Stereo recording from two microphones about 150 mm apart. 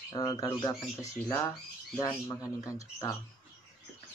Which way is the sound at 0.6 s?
20° left (ahead or behind).